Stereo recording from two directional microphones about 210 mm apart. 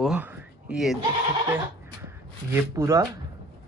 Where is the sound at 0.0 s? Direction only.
5° right (ahead or behind).